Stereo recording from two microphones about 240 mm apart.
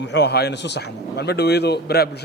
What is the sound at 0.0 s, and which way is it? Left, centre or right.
A man's voice, left.